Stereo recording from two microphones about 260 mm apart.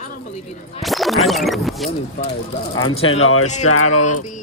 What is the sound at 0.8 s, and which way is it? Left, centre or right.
Speech, centre.